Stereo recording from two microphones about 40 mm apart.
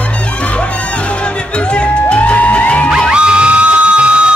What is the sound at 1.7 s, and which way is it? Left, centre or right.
Music, left.